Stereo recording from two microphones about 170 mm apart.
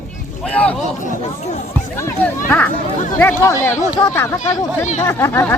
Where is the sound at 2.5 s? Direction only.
10° left (ahead or behind).